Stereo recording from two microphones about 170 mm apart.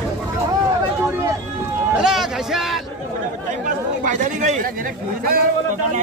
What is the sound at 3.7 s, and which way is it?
Speech, 50° right (ahead or behind).